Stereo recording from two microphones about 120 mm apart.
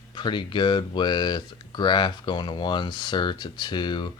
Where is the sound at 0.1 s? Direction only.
40° left (ahead or behind).